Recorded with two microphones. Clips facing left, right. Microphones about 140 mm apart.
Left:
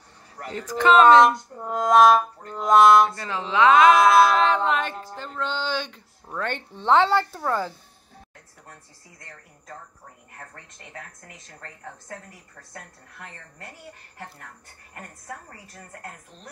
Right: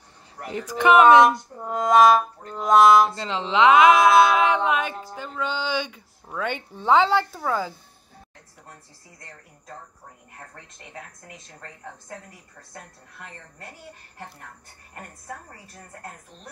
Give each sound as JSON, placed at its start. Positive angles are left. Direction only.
{"t": 0.4, "sound": "speech", "side_deg": -15}
{"t": 1.2, "sound": "music", "side_deg": 0}
{"t": 3.2, "sound": "speech", "side_deg": -20}
{"t": 3.7, "sound": "music", "side_deg": 0}
{"t": 4.5, "sound": "speech", "side_deg": -10}